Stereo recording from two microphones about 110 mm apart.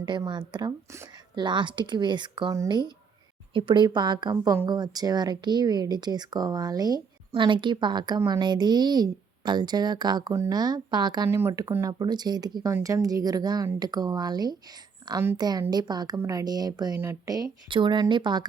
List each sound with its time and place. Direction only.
0.3 s speech: 45° right (ahead or behind)
11.3 s speech: 20° right (ahead or behind)
11.8 s speech: 35° right (ahead or behind)
17.7 s speech: 45° right (ahead or behind)